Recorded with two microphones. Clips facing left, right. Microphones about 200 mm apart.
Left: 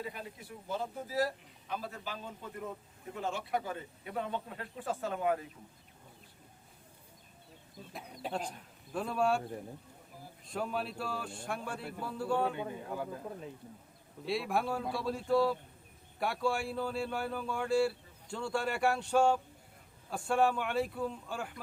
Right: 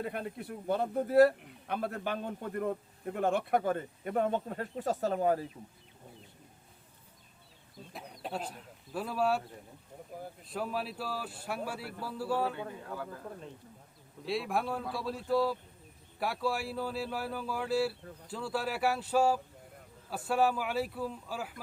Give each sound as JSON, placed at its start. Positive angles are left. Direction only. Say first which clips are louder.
{"t": 0.0, "sound": "a man's voice", "louder": "right 6 dB", "side_deg": -60}
{"t": 7.9, "sound": "speech", "louder": "left 1 dB", "side_deg": 0}
{"t": 10.5, "sound": "a man's voice", "louder": "even", "side_deg": 0}
{"t": 12.5, "sound": "speech", "louder": "left 2 dB", "side_deg": 15}
{"t": 14.3, "sound": "a man's voice", "louder": "even", "side_deg": 0}